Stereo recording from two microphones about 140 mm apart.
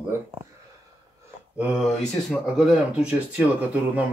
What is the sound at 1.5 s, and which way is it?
Speech, centre (ahead or behind).